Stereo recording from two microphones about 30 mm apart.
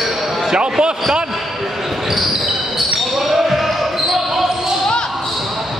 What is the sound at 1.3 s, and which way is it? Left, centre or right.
Basketball bounce, centre.